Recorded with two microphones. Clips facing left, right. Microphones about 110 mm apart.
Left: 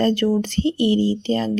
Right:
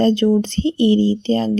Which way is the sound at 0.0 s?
20° right (ahead or behind).